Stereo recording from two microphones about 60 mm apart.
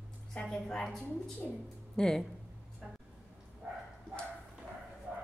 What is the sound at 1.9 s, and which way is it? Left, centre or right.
Speech, centre.